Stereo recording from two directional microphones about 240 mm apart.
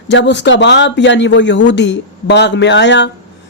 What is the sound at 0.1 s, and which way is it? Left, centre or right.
Speech, left.